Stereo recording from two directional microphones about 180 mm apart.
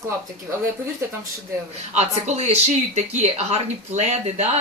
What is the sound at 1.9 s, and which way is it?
Speech, 40° right (ahead or behind).